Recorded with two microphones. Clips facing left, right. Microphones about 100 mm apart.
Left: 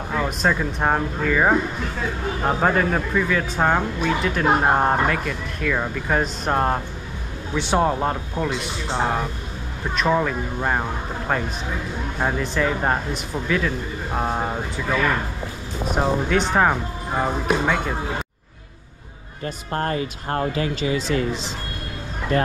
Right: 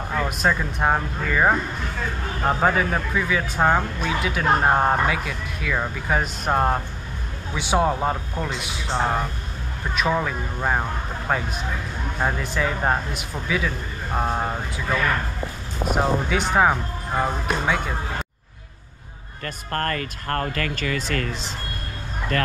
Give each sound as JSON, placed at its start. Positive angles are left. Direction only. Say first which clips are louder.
{"t": 0.4, "sound": "speech", "louder": "even", "side_deg": 0}
{"t": 20.5, "sound": "speech", "louder": "left 4 dB", "side_deg": -55}